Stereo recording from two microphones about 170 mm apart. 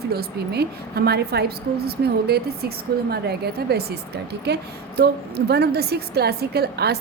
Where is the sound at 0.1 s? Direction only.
70° right (ahead or behind).